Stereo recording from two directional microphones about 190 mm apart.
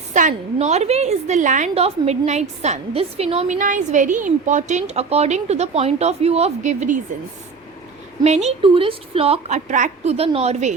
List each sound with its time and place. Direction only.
0.1 s a woman's voice: 40° right (ahead or behind)
3.6 s a woman's voice: 40° right (ahead or behind)
8.2 s a woman's voice: 35° right (ahead or behind)